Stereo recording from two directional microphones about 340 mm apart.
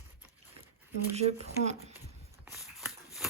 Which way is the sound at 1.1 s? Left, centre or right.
Centre.